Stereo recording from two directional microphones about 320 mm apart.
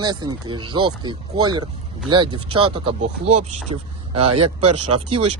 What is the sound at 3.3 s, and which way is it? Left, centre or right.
Speech, right.